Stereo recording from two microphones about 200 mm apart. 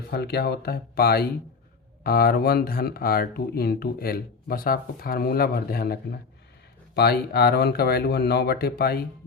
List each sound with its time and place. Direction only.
0.1 s speech: 55° left (ahead or behind)